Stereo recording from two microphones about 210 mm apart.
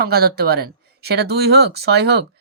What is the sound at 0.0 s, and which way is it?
Speech, 50° right (ahead or behind).